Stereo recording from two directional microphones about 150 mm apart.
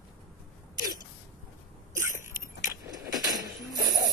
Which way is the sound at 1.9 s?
20° right (ahead or behind).